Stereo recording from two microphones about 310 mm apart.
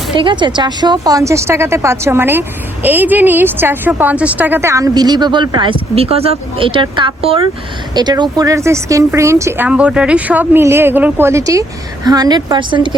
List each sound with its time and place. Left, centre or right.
0.2 s speech: centre